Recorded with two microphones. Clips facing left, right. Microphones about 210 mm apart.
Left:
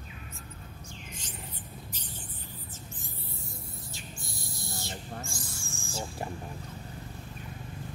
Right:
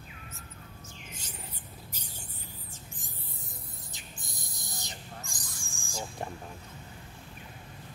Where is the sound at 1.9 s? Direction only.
10° right (ahead or behind).